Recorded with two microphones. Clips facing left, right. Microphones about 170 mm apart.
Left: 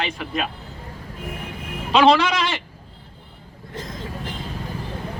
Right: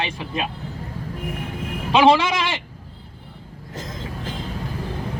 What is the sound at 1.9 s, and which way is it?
Speech, 15° right (ahead or behind).